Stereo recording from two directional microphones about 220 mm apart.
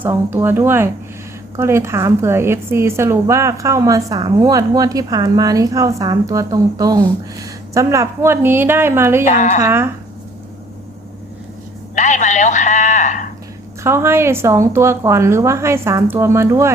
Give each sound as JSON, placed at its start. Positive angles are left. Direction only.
{"t": 0.0, "sound": "a woman's voice", "side_deg": -10}
{"t": 9.3, "sound": "a woman's voice", "side_deg": 35}
{"t": 9.6, "sound": "a woman's voice", "side_deg": -10}
{"t": 11.9, "sound": "a sound", "side_deg": 35}
{"t": 13.8, "sound": "a woman's voice", "side_deg": -10}